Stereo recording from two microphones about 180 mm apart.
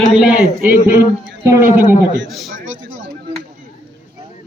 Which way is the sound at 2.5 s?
45° right (ahead or behind).